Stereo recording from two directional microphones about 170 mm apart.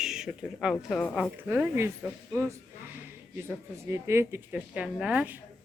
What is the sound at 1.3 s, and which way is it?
Speech, 10° right (ahead or behind).